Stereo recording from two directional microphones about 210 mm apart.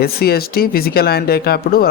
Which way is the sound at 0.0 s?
45° left (ahead or behind).